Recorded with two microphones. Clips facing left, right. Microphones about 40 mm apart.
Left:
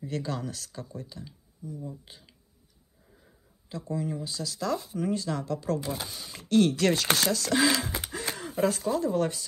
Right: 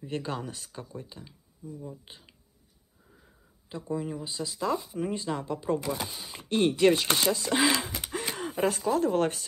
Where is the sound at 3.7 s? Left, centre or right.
Centre.